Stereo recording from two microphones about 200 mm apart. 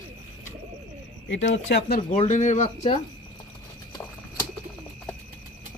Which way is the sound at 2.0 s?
35° left (ahead or behind).